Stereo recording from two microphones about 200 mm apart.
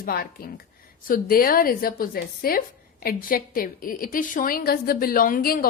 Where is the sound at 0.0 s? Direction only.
50° left (ahead or behind).